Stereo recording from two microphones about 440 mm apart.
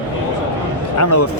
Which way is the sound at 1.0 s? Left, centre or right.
Left.